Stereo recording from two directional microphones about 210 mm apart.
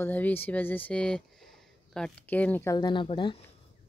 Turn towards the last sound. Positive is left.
turn(degrees=25)  # may be behind; listen again after turning